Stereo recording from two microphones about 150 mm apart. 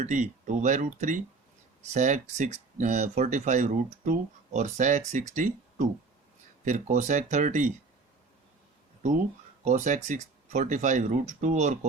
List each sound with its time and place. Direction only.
0.0 s speech: 55° right (ahead or behind)
9.6 s speech: 55° right (ahead or behind)